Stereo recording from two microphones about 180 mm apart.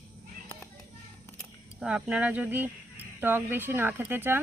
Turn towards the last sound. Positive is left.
turn(degrees=-10)  # may be behind; listen again after turning